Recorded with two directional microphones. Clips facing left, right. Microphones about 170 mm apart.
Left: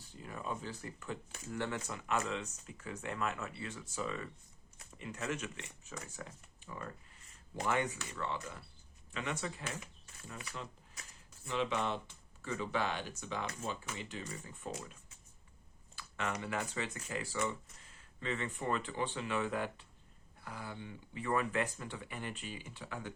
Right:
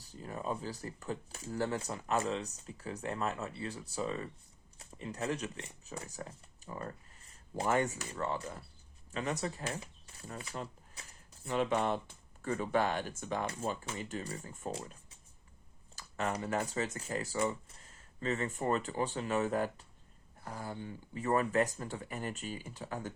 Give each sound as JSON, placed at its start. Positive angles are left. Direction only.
{"t": 0.0, "sound": "speech", "side_deg": -35}
{"t": 11.4, "sound": "speech", "side_deg": -45}
{"t": 16.0, "sound": "speech", "side_deg": -40}